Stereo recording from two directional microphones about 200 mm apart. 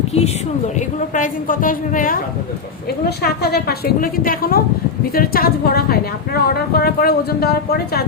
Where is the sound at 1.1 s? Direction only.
40° left (ahead or behind).